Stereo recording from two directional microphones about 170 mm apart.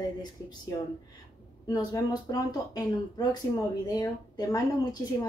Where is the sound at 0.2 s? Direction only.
25° left (ahead or behind).